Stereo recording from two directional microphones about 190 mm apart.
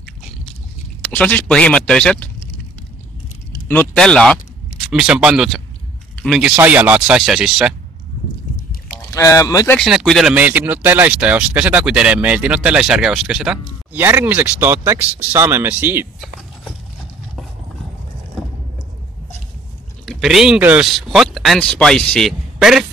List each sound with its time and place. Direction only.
1.0 s speech: 5° left (ahead or behind)
3.6 s speech: 10° left (ahead or behind)
9.1 s speech: 15° left (ahead or behind)
9.8 s speech: centre (ahead or behind)
20.1 s speech: centre (ahead or behind)